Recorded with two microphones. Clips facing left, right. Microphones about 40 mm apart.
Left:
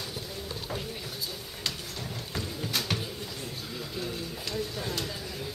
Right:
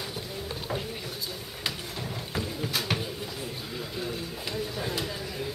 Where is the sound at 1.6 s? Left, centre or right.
Centre.